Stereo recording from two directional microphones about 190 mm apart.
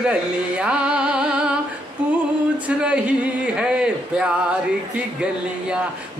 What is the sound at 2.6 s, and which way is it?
Speech, 5° right (ahead or behind).